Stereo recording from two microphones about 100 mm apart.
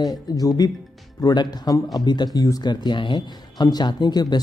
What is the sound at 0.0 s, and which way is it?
Speech, 40° left (ahead or behind).